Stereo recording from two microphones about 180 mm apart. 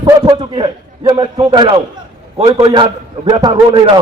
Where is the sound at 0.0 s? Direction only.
25° right (ahead or behind).